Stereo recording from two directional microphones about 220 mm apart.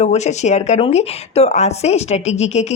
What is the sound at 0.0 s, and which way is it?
Speech, 30° left (ahead or behind).